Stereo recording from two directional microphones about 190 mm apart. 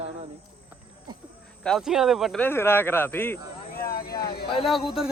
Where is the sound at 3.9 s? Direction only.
55° left (ahead or behind).